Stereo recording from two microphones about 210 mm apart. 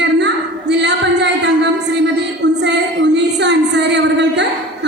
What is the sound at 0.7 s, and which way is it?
Music, 55° right (ahead or behind).